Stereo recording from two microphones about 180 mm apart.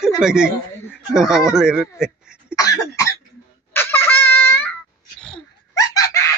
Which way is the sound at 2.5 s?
20° left (ahead or behind).